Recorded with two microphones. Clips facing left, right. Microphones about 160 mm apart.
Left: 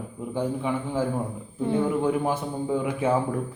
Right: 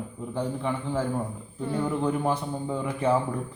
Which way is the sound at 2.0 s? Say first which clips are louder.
Left 1 dB; 5° left (ahead or behind).